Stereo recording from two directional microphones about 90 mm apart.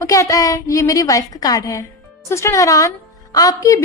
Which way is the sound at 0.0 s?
40° left (ahead or behind).